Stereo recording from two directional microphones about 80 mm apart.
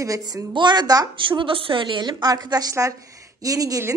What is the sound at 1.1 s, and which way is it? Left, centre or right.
A woman's voice, right.